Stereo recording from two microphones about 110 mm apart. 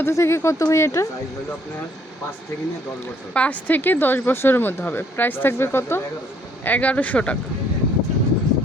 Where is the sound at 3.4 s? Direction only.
15° left (ahead or behind).